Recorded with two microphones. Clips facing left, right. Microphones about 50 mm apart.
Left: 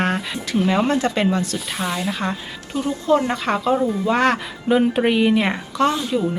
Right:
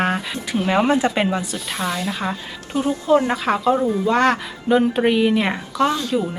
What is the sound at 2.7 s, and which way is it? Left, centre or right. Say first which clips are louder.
Speech: right 2 dB; right.